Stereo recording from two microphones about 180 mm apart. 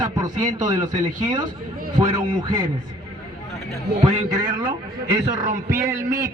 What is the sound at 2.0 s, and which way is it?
Speech, 25° right (ahead or behind).